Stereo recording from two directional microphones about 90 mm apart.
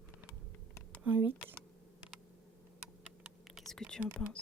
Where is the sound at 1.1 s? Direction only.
15° right (ahead or behind).